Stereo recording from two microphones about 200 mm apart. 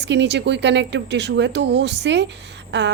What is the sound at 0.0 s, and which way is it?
A woman's voice, 60° right (ahead or behind).